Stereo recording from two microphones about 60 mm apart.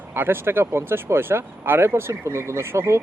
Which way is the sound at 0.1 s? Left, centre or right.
Right.